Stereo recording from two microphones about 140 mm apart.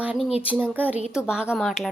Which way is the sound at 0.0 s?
10° right (ahead or behind).